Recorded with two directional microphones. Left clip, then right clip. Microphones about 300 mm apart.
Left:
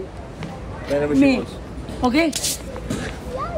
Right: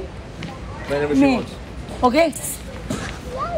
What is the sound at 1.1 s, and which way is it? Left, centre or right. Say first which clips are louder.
Speech: even; centre.